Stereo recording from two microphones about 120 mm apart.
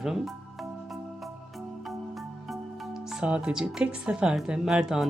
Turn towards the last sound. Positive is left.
turn(degrees=-5)  # may be behind; listen again after turning